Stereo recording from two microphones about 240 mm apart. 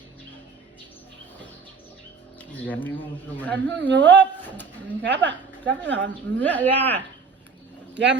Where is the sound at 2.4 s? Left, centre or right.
Centre.